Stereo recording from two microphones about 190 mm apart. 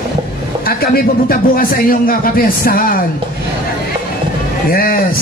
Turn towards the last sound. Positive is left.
turn(degrees=50)  # may be behind; listen again after turning